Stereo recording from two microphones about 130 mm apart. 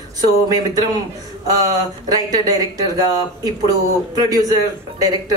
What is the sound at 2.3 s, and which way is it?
A man's voice, 30° right (ahead or behind).